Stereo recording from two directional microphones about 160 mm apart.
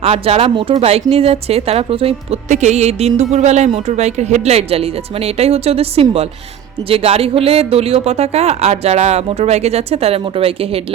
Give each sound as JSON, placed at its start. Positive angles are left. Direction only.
{"t": 0.0, "sound": "a woman's voice", "side_deg": -40}